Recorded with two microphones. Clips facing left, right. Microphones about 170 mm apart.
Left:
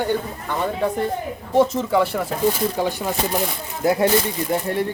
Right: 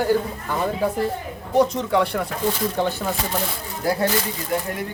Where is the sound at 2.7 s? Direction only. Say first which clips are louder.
Left 1 dB; 15° left (ahead or behind).